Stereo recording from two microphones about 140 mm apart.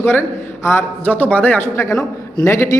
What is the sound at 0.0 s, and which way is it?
A man's voice, 15° left (ahead or behind).